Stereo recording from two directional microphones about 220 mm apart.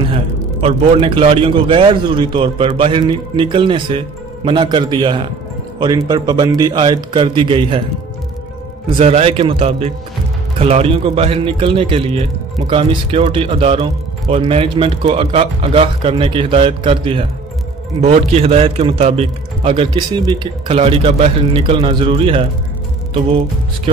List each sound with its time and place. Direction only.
0.1 s a man's voice: 25° right (ahead or behind)
8.9 s a man's voice: 25° right (ahead or behind)